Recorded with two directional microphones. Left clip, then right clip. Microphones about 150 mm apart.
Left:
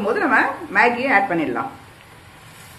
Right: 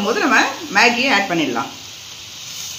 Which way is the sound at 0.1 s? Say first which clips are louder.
Right 2 dB; 90° right.